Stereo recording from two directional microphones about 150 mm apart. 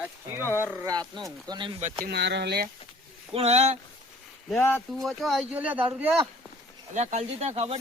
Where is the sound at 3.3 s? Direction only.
45° right (ahead or behind).